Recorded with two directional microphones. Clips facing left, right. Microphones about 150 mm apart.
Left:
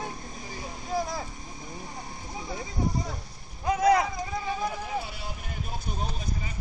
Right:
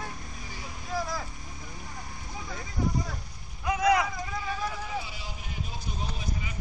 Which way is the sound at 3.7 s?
35° left (ahead or behind).